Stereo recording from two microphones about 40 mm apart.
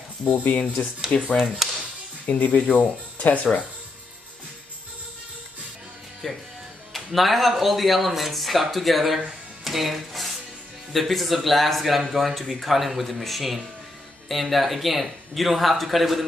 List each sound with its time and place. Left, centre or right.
0.3 s speech: left
1.3 s speech: centre
2.2 s speech: left
6.2 s speech: centre